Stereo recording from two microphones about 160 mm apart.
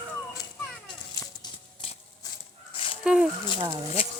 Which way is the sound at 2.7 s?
35° left (ahead or behind).